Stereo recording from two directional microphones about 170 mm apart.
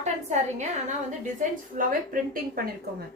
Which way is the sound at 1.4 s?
50° right (ahead or behind).